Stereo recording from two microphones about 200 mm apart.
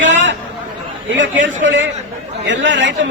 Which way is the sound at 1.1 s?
65° right (ahead or behind).